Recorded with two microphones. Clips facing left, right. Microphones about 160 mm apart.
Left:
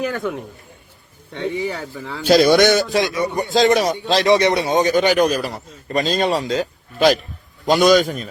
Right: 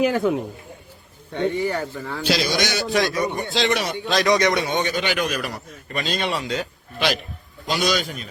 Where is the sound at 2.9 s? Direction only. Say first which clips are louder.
Left 2 dB; 20° left (ahead or behind).